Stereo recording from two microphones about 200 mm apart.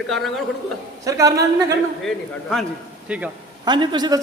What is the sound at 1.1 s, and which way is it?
Speech, 15° right (ahead or behind).